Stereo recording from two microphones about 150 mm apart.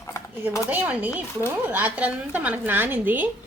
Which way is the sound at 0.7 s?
10° right (ahead or behind).